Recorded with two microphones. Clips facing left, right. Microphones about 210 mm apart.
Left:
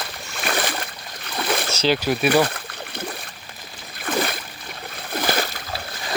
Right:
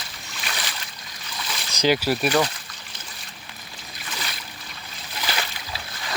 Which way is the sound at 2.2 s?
60° left (ahead or behind).